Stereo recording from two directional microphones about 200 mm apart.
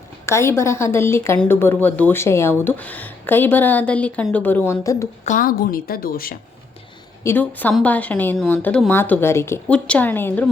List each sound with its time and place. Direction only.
0.3 s speech: 15° left (ahead or behind)
5.2 s a woman's voice: 40° left (ahead or behind)
7.3 s speech: 10° left (ahead or behind)